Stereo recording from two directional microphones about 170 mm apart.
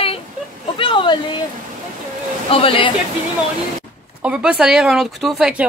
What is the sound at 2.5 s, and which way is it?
Speech, 30° left (ahead or behind).